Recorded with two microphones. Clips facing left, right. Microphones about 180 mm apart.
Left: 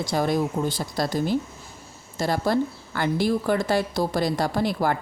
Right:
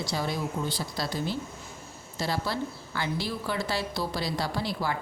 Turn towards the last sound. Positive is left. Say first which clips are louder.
# left 7 dB
turn(degrees=50)  # may be behind; listen again after turning